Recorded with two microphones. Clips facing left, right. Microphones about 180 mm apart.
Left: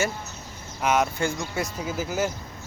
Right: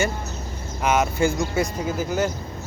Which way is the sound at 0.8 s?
Centre (ahead or behind).